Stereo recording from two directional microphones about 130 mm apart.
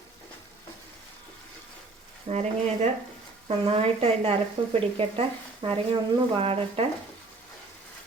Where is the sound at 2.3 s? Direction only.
60° right (ahead or behind); by 5.8 s 40° right (ahead or behind).